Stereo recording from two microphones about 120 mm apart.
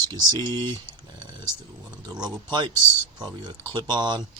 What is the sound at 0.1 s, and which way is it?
Speech, 35° right (ahead or behind).